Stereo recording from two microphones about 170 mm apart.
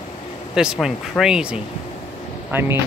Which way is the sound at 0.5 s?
5° right (ahead or behind).